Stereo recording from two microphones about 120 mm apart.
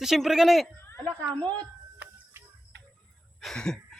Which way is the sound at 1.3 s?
10° left (ahead or behind).